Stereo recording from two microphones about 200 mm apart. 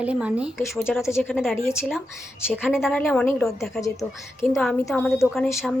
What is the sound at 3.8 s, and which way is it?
Speech, 15° left (ahead or behind).